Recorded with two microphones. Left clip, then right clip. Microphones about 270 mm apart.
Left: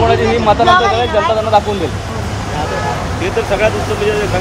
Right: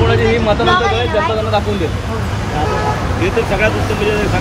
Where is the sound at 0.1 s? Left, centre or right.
Left.